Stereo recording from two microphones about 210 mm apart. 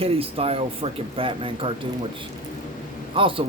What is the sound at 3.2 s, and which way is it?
Speech, 25° right (ahead or behind).